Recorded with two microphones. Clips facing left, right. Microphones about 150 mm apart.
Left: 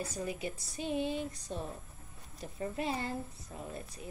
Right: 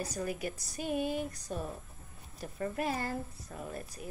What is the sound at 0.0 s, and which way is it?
Speech, 25° left (ahead or behind).